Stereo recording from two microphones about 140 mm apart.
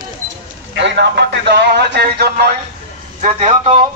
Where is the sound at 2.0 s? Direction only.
90° right.